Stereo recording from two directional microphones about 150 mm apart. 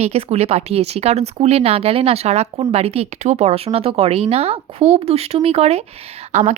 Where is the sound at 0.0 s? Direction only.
45° right (ahead or behind).